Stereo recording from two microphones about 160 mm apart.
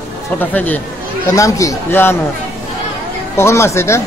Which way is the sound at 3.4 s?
15° left (ahead or behind).